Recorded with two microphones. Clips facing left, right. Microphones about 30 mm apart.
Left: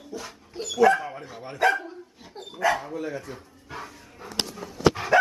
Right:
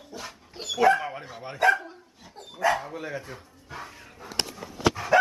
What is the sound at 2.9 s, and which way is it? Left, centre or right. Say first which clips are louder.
Speech: left 3 dB; centre.